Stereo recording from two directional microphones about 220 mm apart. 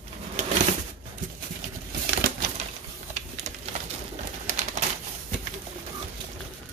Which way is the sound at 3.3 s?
30° right (ahead or behind).